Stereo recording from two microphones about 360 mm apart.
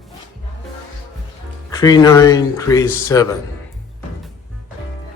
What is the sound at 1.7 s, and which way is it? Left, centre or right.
Speech, centre.